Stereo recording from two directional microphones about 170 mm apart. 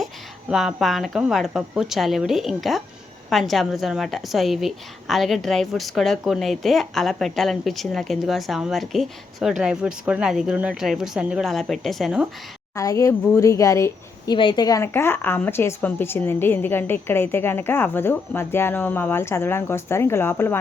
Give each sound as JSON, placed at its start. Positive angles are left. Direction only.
{"t": 0.5, "sound": "a woman's voice", "side_deg": 0}
{"t": 12.7, "sound": "a woman's voice", "side_deg": 20}